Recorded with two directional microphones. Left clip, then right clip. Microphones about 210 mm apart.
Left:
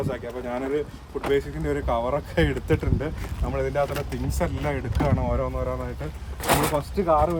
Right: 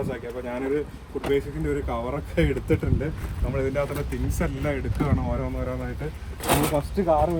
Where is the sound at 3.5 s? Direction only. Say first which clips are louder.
Left 1 dB; 55° left (ahead or behind).